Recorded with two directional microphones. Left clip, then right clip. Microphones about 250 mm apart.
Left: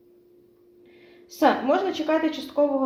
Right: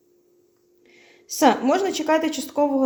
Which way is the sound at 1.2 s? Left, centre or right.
Right.